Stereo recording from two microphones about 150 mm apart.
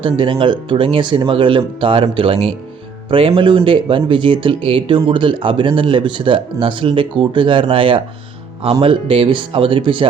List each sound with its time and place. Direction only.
0.0 s speech: 35° right (ahead or behind)